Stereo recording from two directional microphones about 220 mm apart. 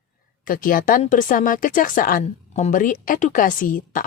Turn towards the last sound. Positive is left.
turn(degrees=40)  # may be behind; listen again after turning